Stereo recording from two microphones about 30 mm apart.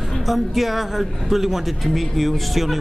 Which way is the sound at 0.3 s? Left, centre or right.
Centre.